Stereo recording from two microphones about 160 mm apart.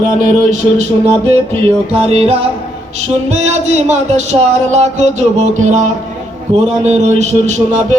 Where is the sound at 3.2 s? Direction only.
45° right (ahead or behind).